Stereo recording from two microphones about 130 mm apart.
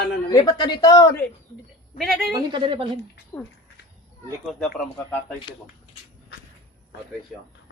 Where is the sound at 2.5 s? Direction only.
40° right (ahead or behind).